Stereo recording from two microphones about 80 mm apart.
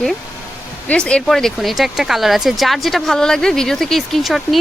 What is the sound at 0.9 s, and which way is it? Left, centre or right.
Speech, centre.